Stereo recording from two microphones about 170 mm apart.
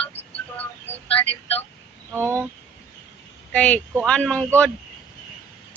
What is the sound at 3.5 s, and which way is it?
Speech, 5° left (ahead or behind).